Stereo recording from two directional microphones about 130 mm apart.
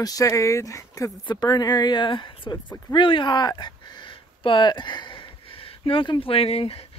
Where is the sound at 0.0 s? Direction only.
25° left (ahead or behind).